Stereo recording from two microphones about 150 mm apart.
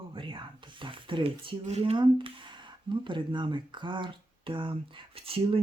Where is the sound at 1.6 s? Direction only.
45° right (ahead or behind).